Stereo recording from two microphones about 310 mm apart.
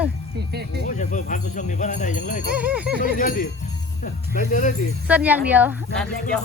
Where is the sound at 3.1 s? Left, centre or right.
Left.